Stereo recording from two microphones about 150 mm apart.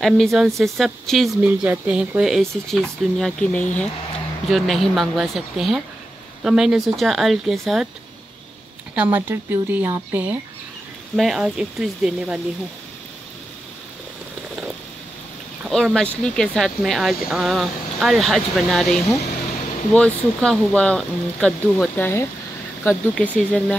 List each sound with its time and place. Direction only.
0.0 s speech: centre (ahead or behind)
8.9 s speech: 10° right (ahead or behind)
15.6 s speech: centre (ahead or behind)
21.9 s speech: 15° left (ahead or behind)